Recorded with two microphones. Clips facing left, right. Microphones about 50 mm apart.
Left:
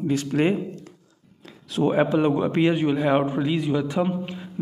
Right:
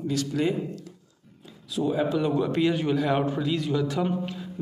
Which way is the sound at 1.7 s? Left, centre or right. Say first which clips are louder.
Left 5 dB; left.